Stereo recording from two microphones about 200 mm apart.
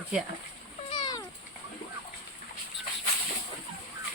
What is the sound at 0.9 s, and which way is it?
Cat, 20° left (ahead or behind).